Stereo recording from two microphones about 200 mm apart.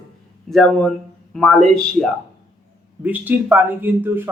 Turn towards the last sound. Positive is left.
turn(degrees=-10)  # may be behind; listen again after turning